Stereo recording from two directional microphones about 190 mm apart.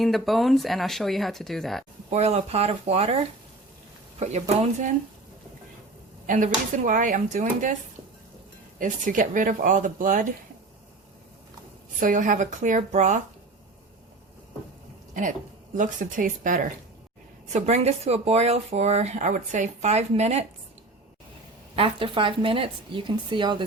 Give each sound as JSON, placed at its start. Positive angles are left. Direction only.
{"t": 0.0, "sound": "speech", "side_deg": 0}
{"t": 2.0, "sound": "speech", "side_deg": -35}
{"t": 6.2, "sound": "speech", "side_deg": -45}
{"t": 8.8, "sound": "speech", "side_deg": -45}
{"t": 11.9, "sound": "speech", "side_deg": -45}
{"t": 15.7, "sound": "speech", "side_deg": -45}
{"t": 21.8, "sound": "speech", "side_deg": -30}